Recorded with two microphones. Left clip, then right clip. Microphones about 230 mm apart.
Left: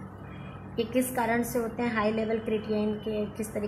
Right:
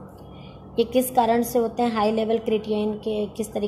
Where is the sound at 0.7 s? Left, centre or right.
Right.